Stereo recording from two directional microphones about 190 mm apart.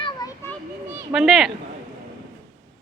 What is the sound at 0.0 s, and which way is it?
Children playing, 20° left (ahead or behind).